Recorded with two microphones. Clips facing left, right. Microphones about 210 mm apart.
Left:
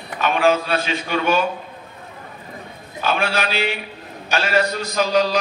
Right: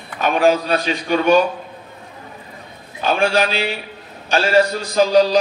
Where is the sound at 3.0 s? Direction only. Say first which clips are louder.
Right 4 dB; 35° right (ahead or behind).